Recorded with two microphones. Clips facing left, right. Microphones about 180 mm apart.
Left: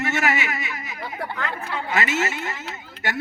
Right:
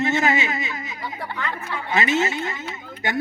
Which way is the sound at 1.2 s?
60° left (ahead or behind).